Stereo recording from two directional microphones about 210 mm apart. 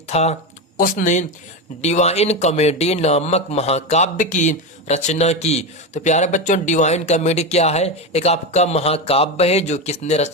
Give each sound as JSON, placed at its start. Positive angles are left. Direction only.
{"t": 0.1, "sound": "speech", "side_deg": 30}